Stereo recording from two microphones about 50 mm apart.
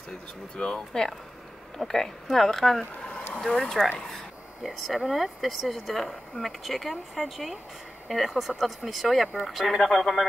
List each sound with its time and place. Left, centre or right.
0.6 s speech: centre
2.8 s vehicle: centre
3.3 s speech: centre
4.6 s speech: centre